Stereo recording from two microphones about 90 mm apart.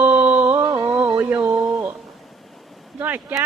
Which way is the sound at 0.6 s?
40° right (ahead or behind).